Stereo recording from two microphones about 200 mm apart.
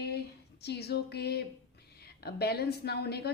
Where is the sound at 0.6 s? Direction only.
55° left (ahead or behind).